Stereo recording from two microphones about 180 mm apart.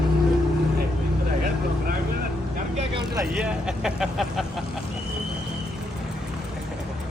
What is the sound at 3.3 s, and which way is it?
Speech, 5° right (ahead or behind).